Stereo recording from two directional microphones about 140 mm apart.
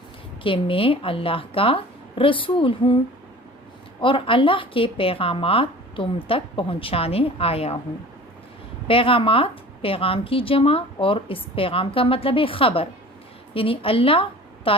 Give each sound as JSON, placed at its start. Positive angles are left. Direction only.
{"t": 0.4, "sound": "a woman's voice", "side_deg": 40}
{"t": 4.0, "sound": "a woman's voice", "side_deg": 40}
{"t": 8.9, "sound": "a woman's voice", "side_deg": 40}